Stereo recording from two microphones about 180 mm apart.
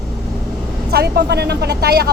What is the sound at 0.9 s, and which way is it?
Speech, 70° right (ahead or behind).